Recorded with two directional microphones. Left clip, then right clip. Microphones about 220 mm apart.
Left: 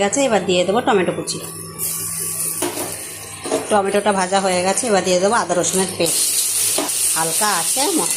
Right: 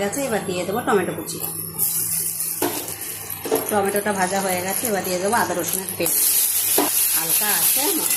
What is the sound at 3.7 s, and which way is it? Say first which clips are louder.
A woman's voice: left 7 dB; 20° left (ahead or behind).